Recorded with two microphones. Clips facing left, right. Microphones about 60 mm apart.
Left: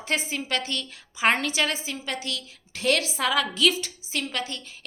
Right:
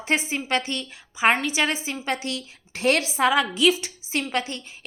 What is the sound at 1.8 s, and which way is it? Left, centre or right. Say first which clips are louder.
A woman's voice: right 4 dB; right.